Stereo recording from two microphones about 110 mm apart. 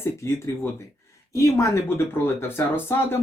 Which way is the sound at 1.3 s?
25° left (ahead or behind).